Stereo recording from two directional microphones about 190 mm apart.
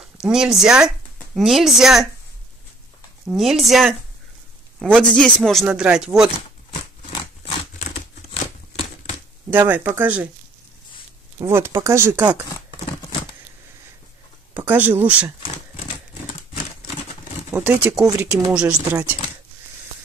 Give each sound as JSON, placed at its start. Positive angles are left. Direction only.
{"t": 0.0, "sound": "speech", "side_deg": -5}
{"t": 3.3, "sound": "speech", "side_deg": 0}
{"t": 5.1, "sound": "speech", "side_deg": 5}
{"t": 6.3, "sound": "a sound", "side_deg": 30}
{"t": 9.5, "sound": "speech", "side_deg": -10}
{"t": 11.3, "sound": "speech", "side_deg": -15}
{"t": 14.5, "sound": "speech", "side_deg": -10}
{"t": 17.5, "sound": "speech", "side_deg": -10}